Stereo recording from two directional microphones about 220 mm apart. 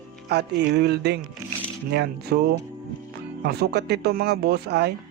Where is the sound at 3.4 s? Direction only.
45° right (ahead or behind).